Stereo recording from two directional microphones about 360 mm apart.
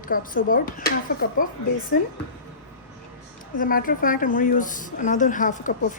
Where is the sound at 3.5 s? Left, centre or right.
Left.